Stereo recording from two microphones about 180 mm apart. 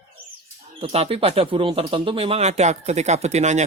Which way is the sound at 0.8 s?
35° right (ahead or behind).